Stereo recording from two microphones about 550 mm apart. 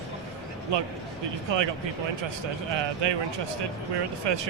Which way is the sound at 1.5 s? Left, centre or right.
Right.